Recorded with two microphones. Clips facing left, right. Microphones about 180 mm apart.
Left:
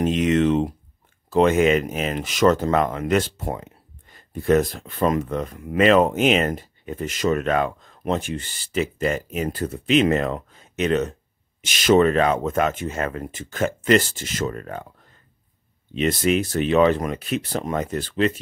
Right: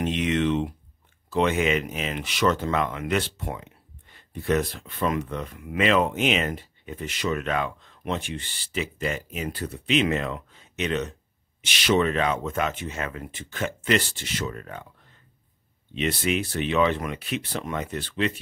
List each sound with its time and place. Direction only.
0.0 s a sound: 40° left (ahead or behind)
1.3 s speech: 45° left (ahead or behind)
15.9 s speech: 45° left (ahead or behind)